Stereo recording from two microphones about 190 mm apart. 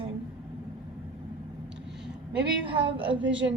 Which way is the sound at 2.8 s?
25° right (ahead or behind).